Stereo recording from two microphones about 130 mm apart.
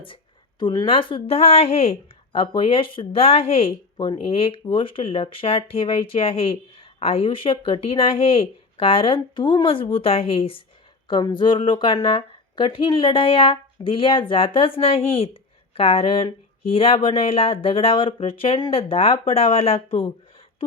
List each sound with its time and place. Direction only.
0.6 s a woman's voice: 35° left (ahead or behind)